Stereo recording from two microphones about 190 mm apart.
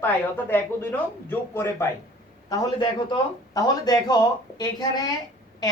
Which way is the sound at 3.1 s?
20° left (ahead or behind).